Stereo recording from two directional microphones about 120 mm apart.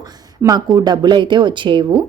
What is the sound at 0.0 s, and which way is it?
Speech, 35° right (ahead or behind).